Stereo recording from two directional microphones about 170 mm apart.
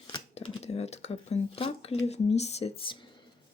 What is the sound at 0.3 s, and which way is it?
Speech, 40° left (ahead or behind).